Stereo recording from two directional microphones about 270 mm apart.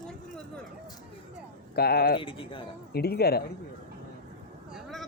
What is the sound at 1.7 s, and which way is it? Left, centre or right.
Speech, left.